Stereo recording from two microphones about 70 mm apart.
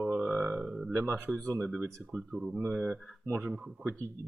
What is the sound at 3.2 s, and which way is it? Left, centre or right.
Speech, right.